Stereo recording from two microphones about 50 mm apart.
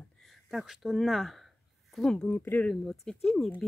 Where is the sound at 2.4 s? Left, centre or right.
Left.